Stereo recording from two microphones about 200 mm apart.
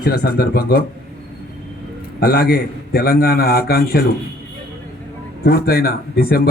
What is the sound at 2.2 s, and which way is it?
Speech, 50° left (ahead or behind).